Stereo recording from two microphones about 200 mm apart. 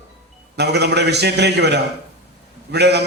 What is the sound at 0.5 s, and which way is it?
A man's voice, 55° right (ahead or behind).